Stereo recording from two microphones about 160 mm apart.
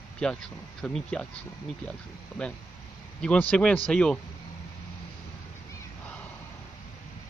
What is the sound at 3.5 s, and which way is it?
Speech, 5° left (ahead or behind).